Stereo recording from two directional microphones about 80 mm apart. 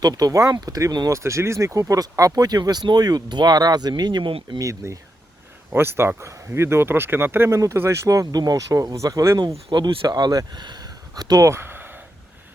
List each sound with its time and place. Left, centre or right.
0.0 s speech: right
1.2 s speech: right
4.5 s speech: right
9.6 s speech: right
11.4 s a sound: right